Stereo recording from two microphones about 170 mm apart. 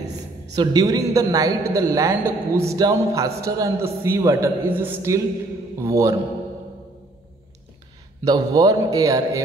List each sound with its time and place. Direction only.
0.6 s a man's voice: 20° right (ahead or behind)
8.3 s a man's voice: 20° right (ahead or behind)